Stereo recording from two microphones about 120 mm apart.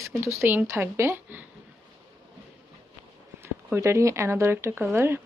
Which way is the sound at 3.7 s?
25° right (ahead or behind).